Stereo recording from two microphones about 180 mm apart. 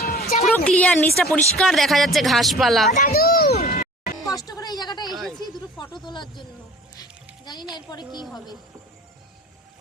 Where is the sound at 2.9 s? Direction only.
40° left (ahead or behind).